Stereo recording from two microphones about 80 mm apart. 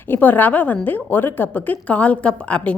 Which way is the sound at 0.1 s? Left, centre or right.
Left.